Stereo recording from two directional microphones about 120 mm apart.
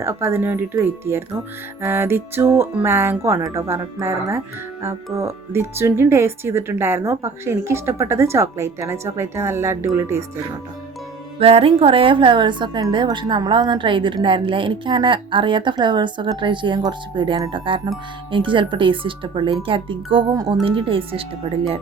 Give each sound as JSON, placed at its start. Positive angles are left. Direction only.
{"t": 0.0, "sound": "speech", "side_deg": -20}
{"t": 11.3, "sound": "a woman's voice", "side_deg": -55}